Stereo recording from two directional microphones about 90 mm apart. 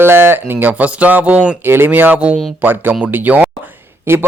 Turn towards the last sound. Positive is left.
turn(degrees=-25)  # may be behind; listen again after turning